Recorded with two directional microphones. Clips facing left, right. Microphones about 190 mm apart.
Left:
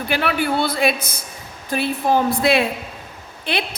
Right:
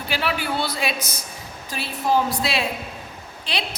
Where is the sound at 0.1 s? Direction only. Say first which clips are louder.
Left 5 dB; 55° left (ahead or behind).